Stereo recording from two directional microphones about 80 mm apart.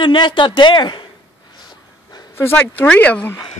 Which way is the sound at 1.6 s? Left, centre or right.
Left.